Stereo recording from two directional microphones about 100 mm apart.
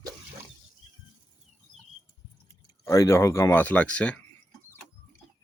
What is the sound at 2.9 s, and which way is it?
Speech, 30° left (ahead or behind).